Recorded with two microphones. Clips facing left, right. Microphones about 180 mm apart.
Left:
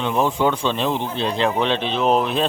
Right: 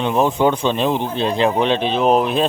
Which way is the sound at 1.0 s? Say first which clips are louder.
Right 3 dB; 50° right (ahead or behind).